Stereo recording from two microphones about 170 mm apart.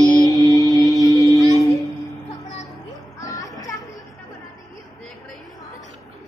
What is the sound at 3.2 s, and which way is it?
Music, 20° left (ahead or behind).